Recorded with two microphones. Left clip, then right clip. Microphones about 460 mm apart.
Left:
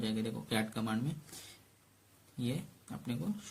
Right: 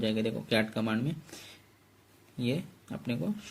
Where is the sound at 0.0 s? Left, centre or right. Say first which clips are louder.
Right 7 dB; left.